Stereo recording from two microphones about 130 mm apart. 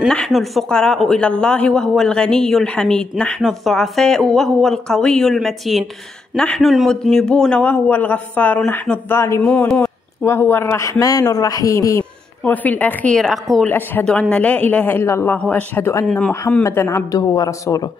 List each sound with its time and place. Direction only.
0.1 s speech: 5° left (ahead or behind); by 12.0 s 25° left (ahead or behind)
12.4 s speech: 15° left (ahead or behind)
13.7 s speech: 15° left (ahead or behind)
16.1 s speech: 5° left (ahead or behind)
16.6 s speech: 20° left (ahead or behind)